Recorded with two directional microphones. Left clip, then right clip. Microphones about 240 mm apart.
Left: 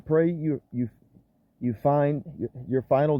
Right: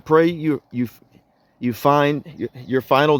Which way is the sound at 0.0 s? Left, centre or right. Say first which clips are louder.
Right 7 dB; right.